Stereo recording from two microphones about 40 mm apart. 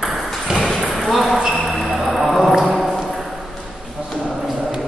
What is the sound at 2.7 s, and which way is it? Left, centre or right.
Clip-clop, centre.